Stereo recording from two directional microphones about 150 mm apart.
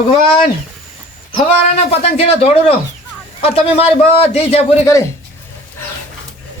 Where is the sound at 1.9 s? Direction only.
45° left (ahead or behind).